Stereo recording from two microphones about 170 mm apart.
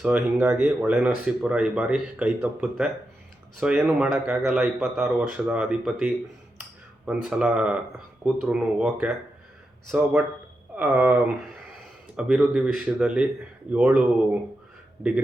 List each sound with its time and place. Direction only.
0.0 s speech: 5° right (ahead or behind)
15.0 s speech: 5° right (ahead or behind)